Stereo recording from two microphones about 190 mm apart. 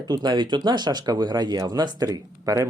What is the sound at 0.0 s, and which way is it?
Speech, 20° right (ahead or behind).